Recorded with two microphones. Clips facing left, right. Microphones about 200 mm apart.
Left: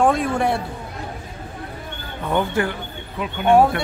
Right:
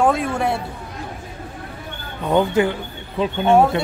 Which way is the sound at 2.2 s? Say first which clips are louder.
Right 4 dB; 20° right (ahead or behind).